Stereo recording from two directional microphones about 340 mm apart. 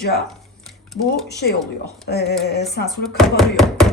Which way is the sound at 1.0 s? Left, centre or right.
Left.